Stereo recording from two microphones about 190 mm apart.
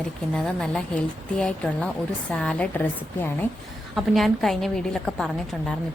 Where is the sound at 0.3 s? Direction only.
5° left (ahead or behind).